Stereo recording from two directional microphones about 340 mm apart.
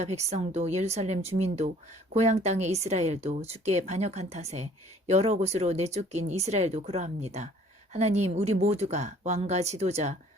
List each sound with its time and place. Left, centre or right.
0.3 s speech: centre